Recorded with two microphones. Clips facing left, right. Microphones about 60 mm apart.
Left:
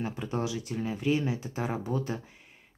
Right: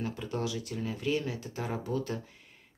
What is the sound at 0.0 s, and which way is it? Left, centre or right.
Speech, left.